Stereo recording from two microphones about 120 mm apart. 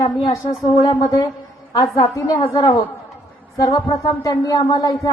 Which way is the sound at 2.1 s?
25° left (ahead or behind).